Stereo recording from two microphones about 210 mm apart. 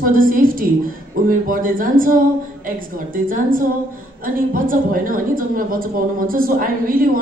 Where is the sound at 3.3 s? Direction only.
40° right (ahead or behind).